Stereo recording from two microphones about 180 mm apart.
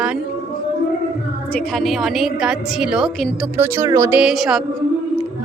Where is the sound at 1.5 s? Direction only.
5° left (ahead or behind).